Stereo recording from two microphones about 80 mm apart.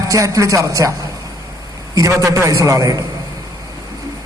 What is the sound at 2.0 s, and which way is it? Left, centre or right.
Speech, right.